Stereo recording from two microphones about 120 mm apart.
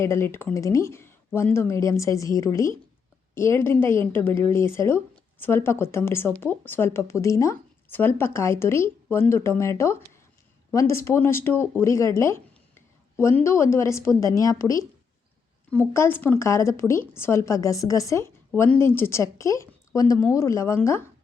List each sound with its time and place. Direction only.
0.0 s a woman's voice: 20° left (ahead or behind)